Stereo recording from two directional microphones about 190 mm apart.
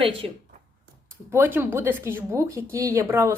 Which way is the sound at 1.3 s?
10° right (ahead or behind).